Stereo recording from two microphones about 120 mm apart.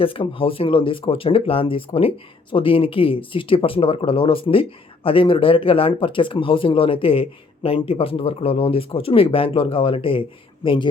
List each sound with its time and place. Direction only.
0.0 s speech: 50° left (ahead or behind)